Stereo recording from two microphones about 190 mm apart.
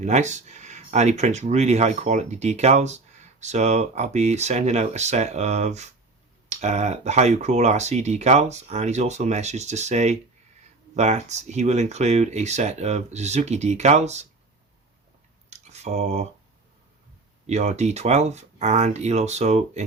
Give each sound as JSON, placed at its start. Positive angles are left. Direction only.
{"t": 0.0, "sound": "speech", "side_deg": -40}
{"t": 15.4, "sound": "a sound", "side_deg": -35}
{"t": 17.4, "sound": "speech", "side_deg": -35}